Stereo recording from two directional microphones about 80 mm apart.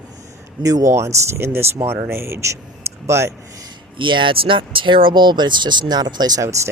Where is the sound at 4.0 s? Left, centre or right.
Right.